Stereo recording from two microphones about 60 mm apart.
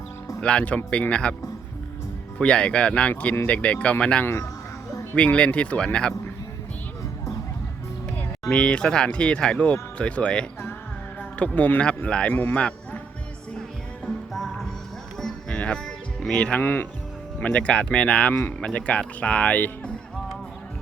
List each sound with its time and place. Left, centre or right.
0.3 s speech: centre
2.4 s speech: centre
8.4 s a man's voice: centre
15.2 s music: centre
16.3 s speech: left
16.6 s speech: left
17.4 s speech: left